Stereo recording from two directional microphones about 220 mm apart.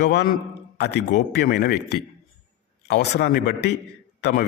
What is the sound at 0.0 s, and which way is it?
A man's voice, 50° left (ahead or behind).